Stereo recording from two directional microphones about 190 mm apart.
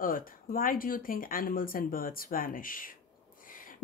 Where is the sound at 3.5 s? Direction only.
45° left (ahead or behind).